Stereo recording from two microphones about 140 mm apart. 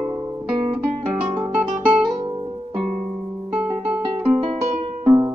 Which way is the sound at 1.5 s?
10° right (ahead or behind).